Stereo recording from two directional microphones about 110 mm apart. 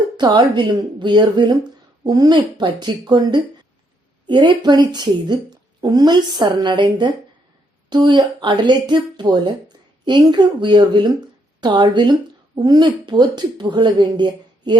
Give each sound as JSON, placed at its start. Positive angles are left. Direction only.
{"t": 0.2, "sound": "a woman's voice", "side_deg": -40}